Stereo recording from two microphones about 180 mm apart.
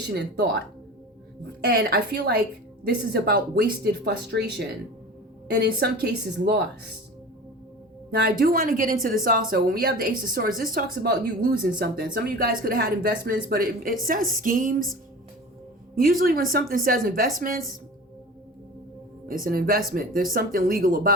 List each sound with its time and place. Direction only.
0.1 s speech: 65° right (ahead or behind)
1.6 s speech: 60° right (ahead or behind)
8.1 s speech: 60° right (ahead or behind)
16.0 s speech: 55° right (ahead or behind)
19.3 s speech: 50° right (ahead or behind)